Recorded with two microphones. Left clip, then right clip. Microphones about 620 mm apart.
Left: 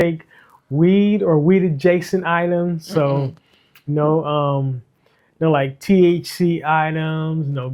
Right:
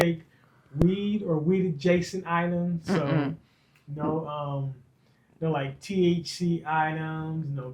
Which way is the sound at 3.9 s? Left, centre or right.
Left.